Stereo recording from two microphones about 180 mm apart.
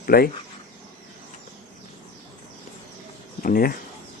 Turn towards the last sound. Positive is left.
turn(degrees=55)  # may be behind; listen again after turning